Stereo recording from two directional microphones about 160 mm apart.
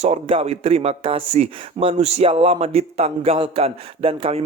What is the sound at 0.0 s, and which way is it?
Speech, 40° right (ahead or behind).